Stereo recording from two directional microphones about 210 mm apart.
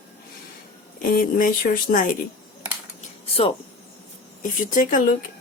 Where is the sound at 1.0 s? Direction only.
40° left (ahead or behind).